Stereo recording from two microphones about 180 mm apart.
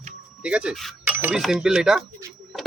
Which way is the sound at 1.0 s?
10° right (ahead or behind).